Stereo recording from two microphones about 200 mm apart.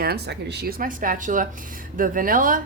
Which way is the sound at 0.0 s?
50° right (ahead or behind).